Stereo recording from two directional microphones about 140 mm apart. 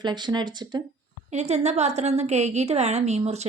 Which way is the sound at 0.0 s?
30° right (ahead or behind).